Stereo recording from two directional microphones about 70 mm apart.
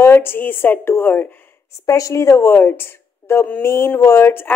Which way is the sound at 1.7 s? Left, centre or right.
Left.